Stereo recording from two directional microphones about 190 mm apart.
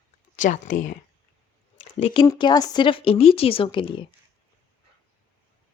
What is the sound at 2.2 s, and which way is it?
Speech, 20° left (ahead or behind).